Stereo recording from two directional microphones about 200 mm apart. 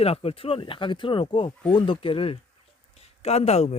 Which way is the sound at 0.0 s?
30° left (ahead or behind).